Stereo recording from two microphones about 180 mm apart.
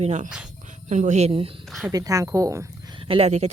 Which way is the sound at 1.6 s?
Centre (ahead or behind).